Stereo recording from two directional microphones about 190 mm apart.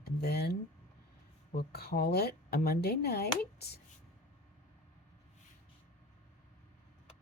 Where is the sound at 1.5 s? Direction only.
55° left (ahead or behind).